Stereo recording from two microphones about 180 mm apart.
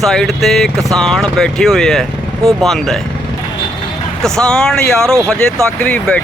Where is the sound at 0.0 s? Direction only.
Centre (ahead or behind).